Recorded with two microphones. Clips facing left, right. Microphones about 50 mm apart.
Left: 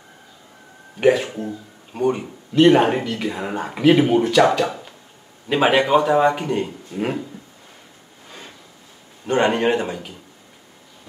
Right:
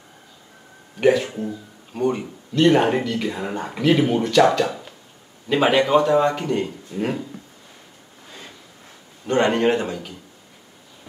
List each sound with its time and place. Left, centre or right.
1.1 s speech: left
2.0 s speech: centre
9.2 s speech: centre